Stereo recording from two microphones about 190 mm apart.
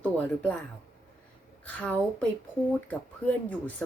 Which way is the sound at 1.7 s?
5° left (ahead or behind).